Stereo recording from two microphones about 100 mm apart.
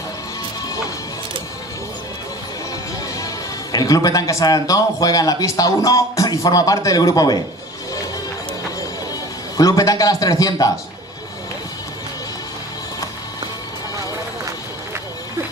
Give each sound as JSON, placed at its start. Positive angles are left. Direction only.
{"t": 3.7, "sound": "a man's voice", "side_deg": 40}
{"t": 9.6, "sound": "a man's voice", "side_deg": 35}